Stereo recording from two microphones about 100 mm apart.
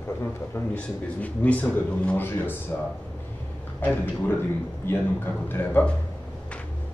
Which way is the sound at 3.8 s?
20° left (ahead or behind).